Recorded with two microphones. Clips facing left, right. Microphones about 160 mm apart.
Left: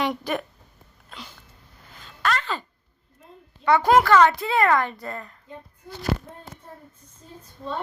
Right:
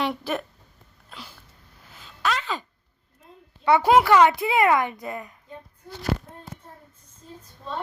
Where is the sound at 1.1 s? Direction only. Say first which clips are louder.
Left 1 dB; 5° right (ahead or behind).